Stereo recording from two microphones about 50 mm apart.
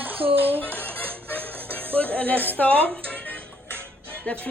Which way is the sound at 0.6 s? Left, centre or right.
Left.